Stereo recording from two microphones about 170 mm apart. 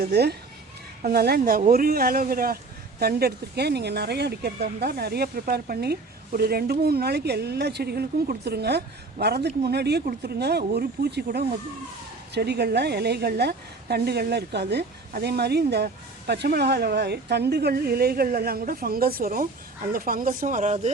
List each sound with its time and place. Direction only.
0.0 s a woman's voice: 70° right (ahead or behind); by 20.9 s 40° right (ahead or behind)